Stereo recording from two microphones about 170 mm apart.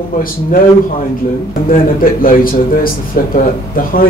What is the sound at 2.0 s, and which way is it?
Speech, 55° left (ahead or behind).